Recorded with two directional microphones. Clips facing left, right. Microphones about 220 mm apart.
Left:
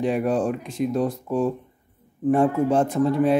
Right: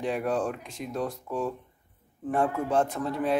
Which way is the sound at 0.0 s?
15° left (ahead or behind).